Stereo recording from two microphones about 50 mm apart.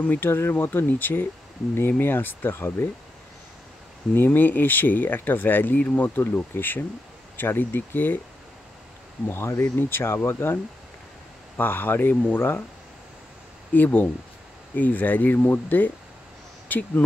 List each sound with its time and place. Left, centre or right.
0.2 s speech: left
4.1 s speech: left
5.8 s speech: left
6.0 s speech: left
9.3 s speech: left
12.1 s speech: left
13.7 s speech: left